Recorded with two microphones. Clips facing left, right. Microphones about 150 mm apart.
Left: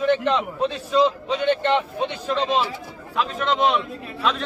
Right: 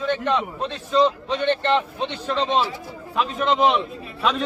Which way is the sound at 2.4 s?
30° right (ahead or behind).